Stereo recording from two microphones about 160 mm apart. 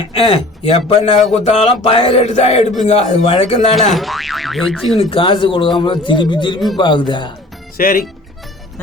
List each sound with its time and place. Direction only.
0.1 s speech: 35° left (ahead or behind)
3.8 s speech: centre (ahead or behind)
4.9 s a man's voice: 35° left (ahead or behind)
7.8 s speech: 65° left (ahead or behind)